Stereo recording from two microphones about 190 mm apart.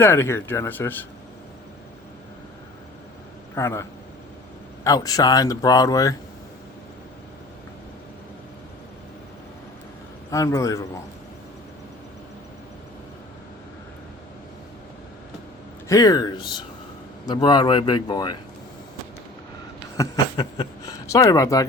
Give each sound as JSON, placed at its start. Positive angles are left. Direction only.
{"t": 0.0, "sound": "speech", "side_deg": 15}
{"t": 3.5, "sound": "speech", "side_deg": 15}
{"t": 10.3, "sound": "speech", "side_deg": 15}
{"t": 15.9, "sound": "speech", "side_deg": 20}
{"t": 20.0, "sound": "speech", "side_deg": 20}